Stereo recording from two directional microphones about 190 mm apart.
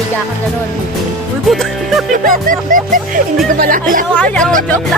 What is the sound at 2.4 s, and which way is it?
Speech, 45° right (ahead or behind).